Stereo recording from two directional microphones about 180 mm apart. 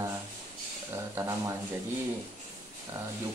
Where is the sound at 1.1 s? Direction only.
15° right (ahead or behind).